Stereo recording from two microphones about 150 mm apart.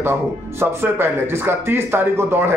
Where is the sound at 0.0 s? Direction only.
15° right (ahead or behind).